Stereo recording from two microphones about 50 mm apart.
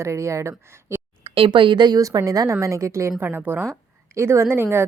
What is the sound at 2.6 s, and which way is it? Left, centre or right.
Speech, right.